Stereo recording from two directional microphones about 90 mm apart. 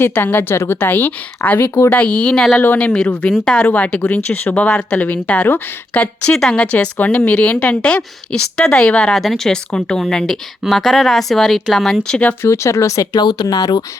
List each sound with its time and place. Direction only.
0.0 s a woman's voice: 20° left (ahead or behind)
1.9 s speech: 15° left (ahead or behind)
12.4 s speech: 30° left (ahead or behind)
13.1 s speech: 50° left (ahead or behind)